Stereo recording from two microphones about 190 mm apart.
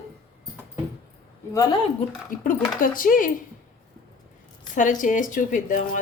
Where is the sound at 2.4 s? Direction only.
45° left (ahead or behind).